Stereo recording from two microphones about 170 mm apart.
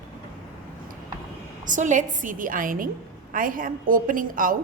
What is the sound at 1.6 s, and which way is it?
A woman's voice, 50° right (ahead or behind).